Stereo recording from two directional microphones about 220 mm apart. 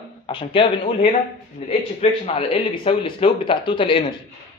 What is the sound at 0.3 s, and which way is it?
Speech, 25° left (ahead or behind).